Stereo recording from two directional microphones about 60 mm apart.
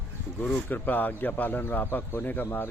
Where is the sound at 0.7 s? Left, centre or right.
Left.